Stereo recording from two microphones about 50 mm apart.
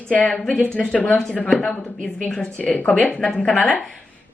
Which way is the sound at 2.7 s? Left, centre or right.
Left.